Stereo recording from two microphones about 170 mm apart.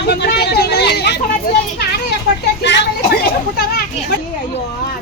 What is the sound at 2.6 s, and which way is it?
Speech, 90° left.